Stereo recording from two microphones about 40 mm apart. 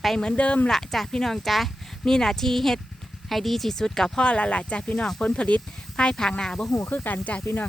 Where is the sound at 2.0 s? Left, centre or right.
Centre.